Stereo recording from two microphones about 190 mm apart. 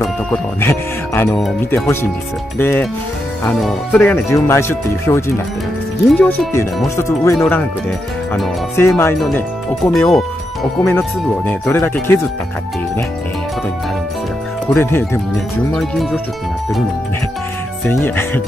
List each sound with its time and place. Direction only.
0.0 s speech: 10° left (ahead or behind)
2.6 s speech: 10° left (ahead or behind)
8.7 s speech: 15° left (ahead or behind)
10.0 s speech: centre (ahead or behind)
11.0 s speech: 15° left (ahead or behind)
14.7 s speech: 15° left (ahead or behind)
15.7 s speech: centre (ahead or behind)
17.9 s speech: 10° left (ahead or behind)